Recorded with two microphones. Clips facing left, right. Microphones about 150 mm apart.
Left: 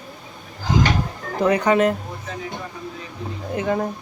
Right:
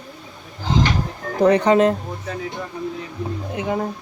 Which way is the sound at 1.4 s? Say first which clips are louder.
Right 3 dB; 30° right (ahead or behind).